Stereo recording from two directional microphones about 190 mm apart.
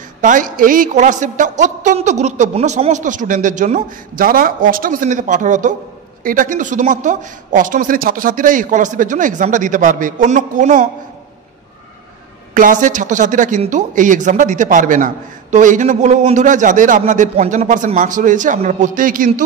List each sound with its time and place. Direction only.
0.2 s speech: 45° right (ahead or behind)
12.5 s speech: 45° right (ahead or behind)